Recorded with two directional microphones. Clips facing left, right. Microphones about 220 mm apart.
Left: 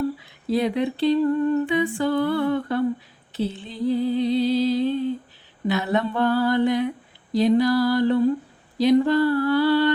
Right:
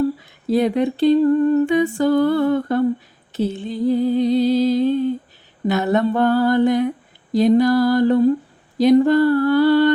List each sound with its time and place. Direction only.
0.4 s humming: 45° right (ahead or behind)